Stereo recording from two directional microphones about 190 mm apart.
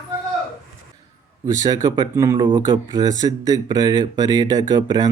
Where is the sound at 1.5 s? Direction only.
15° right (ahead or behind).